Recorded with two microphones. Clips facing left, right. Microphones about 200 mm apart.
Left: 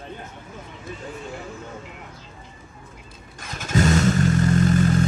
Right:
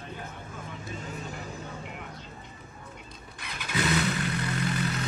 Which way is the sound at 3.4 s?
45° left (ahead or behind).